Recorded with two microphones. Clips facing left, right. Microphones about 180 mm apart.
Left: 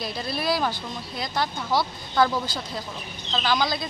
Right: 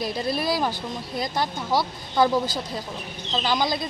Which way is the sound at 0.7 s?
45° right (ahead or behind).